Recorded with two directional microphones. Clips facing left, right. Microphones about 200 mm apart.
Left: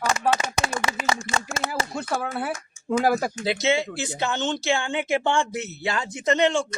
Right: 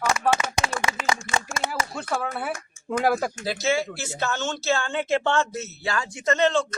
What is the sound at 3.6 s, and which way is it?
Speech, 20° left (ahead or behind).